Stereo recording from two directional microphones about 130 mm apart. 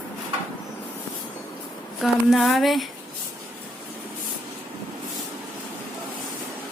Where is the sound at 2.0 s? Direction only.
Centre (ahead or behind).